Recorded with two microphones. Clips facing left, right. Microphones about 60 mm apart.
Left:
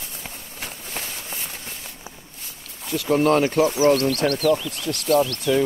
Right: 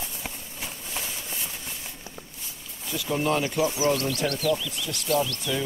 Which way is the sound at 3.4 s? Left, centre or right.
Left.